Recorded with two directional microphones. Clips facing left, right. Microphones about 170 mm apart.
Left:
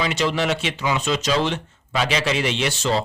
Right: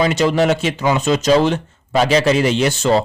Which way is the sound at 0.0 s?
45° right (ahead or behind).